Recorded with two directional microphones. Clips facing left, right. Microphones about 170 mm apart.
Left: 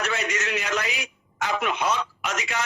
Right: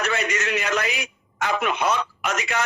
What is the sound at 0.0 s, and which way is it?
A man's voice, 60° right (ahead or behind).